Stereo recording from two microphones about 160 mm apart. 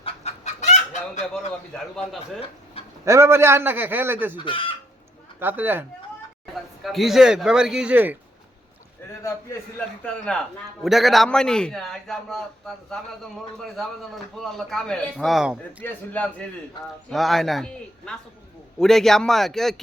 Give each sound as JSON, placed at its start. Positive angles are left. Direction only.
{"t": 0.0, "sound": "chicken", "side_deg": 45}
{"t": 1.3, "sound": "a man's voice", "side_deg": 5}
{"t": 3.0, "sound": "a man's voice", "side_deg": -15}
{"t": 4.4, "sound": "speech", "side_deg": 35}
{"t": 5.4, "sound": "a man's voice", "side_deg": -10}
{"t": 6.5, "sound": "speech", "side_deg": 0}
{"t": 10.0, "sound": "a man's voice", "side_deg": 5}
{"t": 15.8, "sound": "a man's voice", "side_deg": 10}